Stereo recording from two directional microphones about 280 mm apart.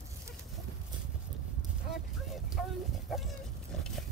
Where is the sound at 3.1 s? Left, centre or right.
Centre.